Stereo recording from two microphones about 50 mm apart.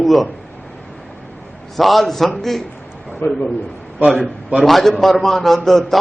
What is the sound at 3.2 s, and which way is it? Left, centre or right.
Speech, left.